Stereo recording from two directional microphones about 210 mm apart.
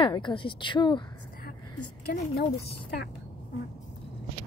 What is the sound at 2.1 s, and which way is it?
Speech, 50° left (ahead or behind).